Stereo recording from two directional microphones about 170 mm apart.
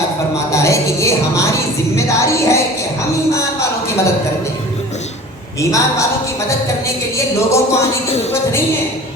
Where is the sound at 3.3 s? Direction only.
15° left (ahead or behind).